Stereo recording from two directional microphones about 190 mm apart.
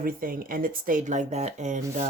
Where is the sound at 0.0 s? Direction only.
50° right (ahead or behind).